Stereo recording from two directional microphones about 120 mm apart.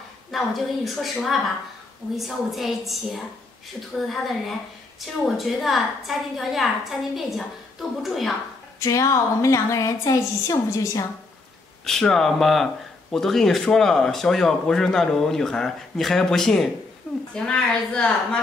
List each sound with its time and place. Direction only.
0.3 s speech: centre (ahead or behind)
8.7 s a woman's voice: 25° left (ahead or behind)
11.8 s a woman's voice: 5° left (ahead or behind)